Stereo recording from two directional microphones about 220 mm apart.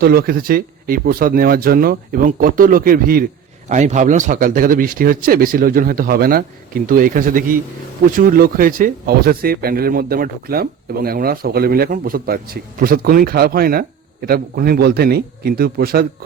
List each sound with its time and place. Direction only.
0.0 s speech: 45° right (ahead or behind)